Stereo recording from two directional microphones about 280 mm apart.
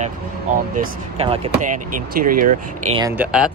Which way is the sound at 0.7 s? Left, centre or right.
Right.